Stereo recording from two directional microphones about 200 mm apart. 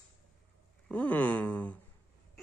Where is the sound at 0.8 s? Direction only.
5° left (ahead or behind).